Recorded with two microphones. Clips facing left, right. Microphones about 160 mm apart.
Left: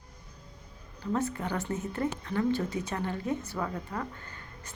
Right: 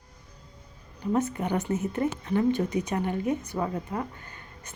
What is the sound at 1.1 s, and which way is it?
A woman's voice, 20° right (ahead or behind).